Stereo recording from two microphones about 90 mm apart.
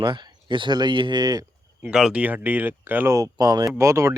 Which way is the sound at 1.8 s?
10° right (ahead or behind).